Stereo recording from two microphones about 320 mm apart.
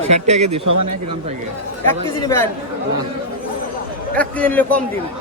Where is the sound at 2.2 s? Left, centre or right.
Centre.